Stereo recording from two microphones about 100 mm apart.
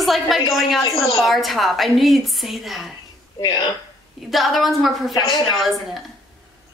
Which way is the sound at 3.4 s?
50° left (ahead or behind).